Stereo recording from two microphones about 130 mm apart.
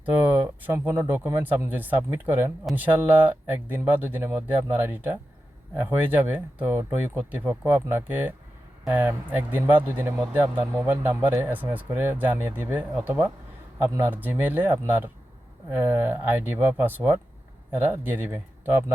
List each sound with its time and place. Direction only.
0.0 s speech: 15° right (ahead or behind)